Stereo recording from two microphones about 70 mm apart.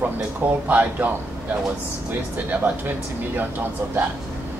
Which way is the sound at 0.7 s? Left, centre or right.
Right.